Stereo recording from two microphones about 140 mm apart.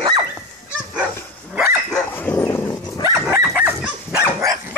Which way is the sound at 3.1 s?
15° right (ahead or behind).